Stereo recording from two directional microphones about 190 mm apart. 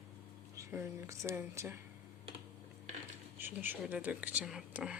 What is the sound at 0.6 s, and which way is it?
Speech, 15° right (ahead or behind).